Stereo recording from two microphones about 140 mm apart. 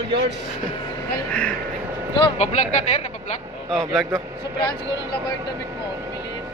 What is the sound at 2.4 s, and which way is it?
Speech, 55° left (ahead or behind).